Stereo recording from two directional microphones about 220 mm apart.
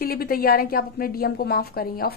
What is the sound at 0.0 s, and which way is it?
A woman's voice, 45° left (ahead or behind).